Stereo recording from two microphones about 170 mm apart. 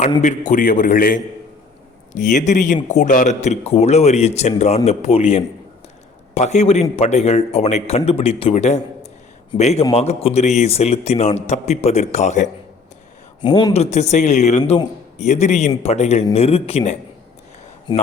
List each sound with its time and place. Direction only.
0.2 s a man's voice: 50° left (ahead or behind)
13.4 s speech: 25° left (ahead or behind)
13.9 s a man's voice: 40° left (ahead or behind)